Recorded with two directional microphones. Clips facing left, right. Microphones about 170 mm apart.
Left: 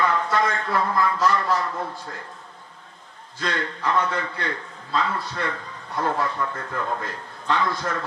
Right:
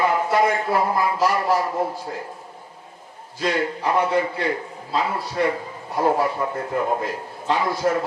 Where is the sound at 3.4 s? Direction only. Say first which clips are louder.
Right 5 dB; 15° right (ahead or behind).